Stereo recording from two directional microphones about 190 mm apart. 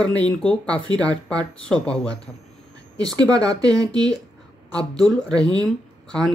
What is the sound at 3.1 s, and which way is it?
Speech, 20° right (ahead or behind).